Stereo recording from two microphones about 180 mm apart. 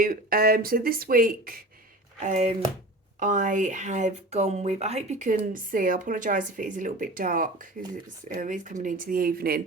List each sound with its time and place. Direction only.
0.0 s speech: 50° right (ahead or behind)
2.2 s speech: 40° right (ahead or behind); by 9.6 s 55° right (ahead or behind)